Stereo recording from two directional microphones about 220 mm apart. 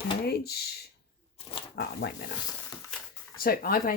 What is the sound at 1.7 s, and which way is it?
Speech, 45° left (ahead or behind).